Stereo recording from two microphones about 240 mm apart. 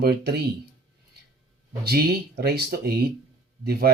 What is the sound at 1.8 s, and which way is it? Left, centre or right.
Speech, right.